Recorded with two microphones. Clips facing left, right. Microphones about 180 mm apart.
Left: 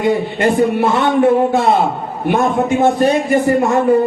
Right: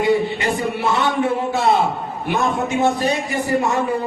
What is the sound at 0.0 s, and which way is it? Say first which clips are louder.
A man's voice: left 3 dB; 50° left (ahead or behind).